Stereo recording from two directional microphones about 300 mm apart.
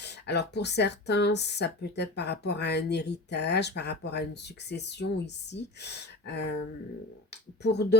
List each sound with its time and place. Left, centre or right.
0.0 s speech: left
7.6 s speech: left